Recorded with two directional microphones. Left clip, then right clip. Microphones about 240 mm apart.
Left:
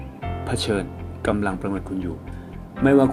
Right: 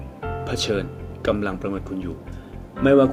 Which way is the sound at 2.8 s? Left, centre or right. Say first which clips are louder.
Right 1 dB; centre.